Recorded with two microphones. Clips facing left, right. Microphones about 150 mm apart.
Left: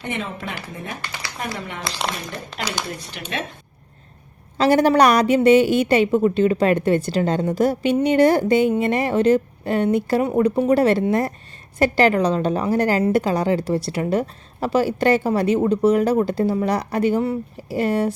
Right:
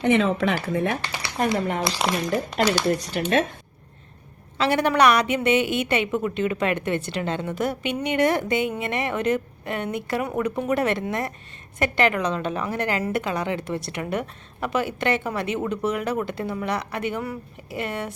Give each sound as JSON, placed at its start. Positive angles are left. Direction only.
{"t": 0.0, "sound": "speech", "side_deg": -90}
{"t": 0.7, "sound": "speech", "side_deg": -75}
{"t": 1.5, "sound": "speech", "side_deg": -40}
{"t": 2.1, "sound": "speech", "side_deg": 0}
{"t": 2.6, "sound": "speech", "side_deg": -45}
{"t": 4.5, "sound": "a woman's voice", "side_deg": 40}